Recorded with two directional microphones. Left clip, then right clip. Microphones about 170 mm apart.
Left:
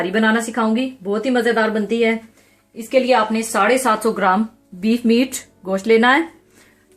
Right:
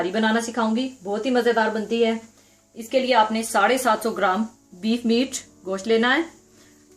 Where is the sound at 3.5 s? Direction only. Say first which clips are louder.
Left 3 dB; 60° left (ahead or behind).